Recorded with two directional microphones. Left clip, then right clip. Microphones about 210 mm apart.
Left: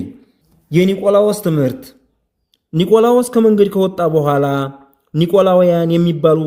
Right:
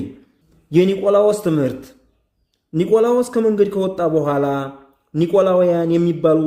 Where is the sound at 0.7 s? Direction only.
35° left (ahead or behind).